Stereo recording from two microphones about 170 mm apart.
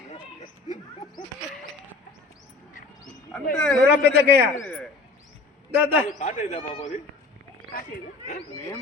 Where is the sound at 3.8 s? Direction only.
80° right.